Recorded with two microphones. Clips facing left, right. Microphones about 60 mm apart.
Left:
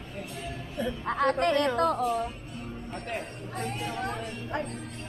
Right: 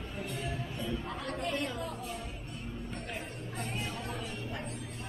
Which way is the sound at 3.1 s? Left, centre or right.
Left.